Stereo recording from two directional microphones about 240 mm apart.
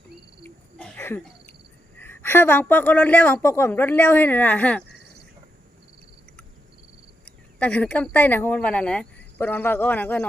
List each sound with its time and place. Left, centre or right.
0.8 s a sound: centre
2.0 s a woman's voice: centre
7.3 s speech: centre